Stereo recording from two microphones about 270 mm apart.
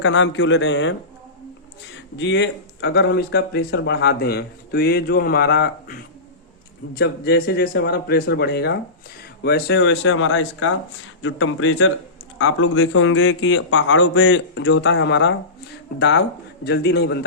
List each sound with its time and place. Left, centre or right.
0.0 s speech: left
2.1 s speech: left
7.0 s speech: left